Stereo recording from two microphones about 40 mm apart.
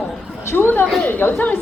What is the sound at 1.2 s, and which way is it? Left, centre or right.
Speech, left.